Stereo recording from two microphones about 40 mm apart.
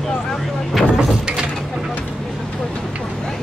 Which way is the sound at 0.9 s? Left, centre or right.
Right.